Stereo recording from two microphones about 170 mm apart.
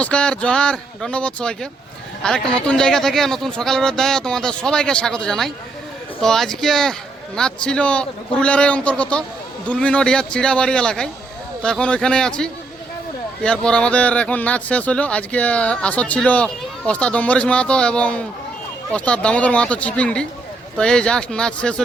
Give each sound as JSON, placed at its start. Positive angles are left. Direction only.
{"t": 0.0, "sound": "speech", "side_deg": 5}